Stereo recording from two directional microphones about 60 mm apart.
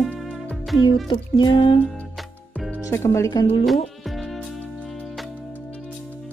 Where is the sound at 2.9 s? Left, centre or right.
Left.